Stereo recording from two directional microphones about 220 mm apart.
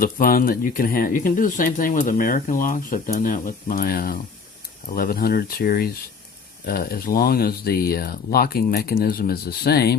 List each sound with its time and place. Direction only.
0.0 s speech: 40° left (ahead or behind)